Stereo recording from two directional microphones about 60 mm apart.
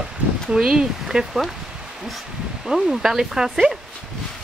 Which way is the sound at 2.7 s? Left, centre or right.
Centre.